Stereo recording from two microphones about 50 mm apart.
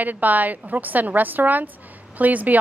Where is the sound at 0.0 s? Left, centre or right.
Right.